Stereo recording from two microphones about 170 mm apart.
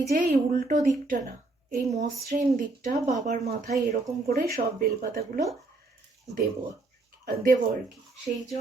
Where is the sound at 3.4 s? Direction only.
65° right (ahead or behind).